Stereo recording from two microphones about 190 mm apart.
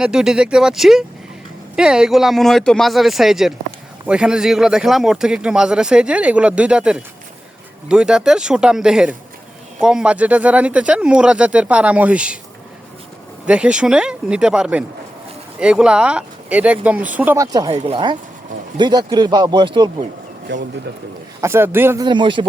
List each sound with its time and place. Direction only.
0.0 s speech: 5° right (ahead or behind)
13.5 s speech: 5° right (ahead or behind)
17.7 s a man's voice: 30° right (ahead or behind)
20.5 s speech: 70° right (ahead or behind)
21.4 s speech: 10° right (ahead or behind)
22.0 s a man's voice: 25° right (ahead or behind)